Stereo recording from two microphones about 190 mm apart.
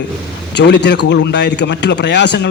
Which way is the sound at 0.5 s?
65° left (ahead or behind).